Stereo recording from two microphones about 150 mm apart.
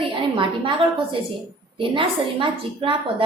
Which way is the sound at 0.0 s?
35° right (ahead or behind).